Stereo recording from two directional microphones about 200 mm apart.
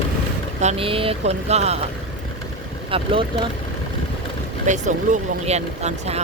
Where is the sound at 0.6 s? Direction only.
30° right (ahead or behind).